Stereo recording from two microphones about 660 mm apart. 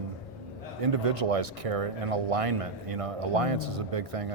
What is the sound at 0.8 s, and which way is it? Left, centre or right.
Speech, right.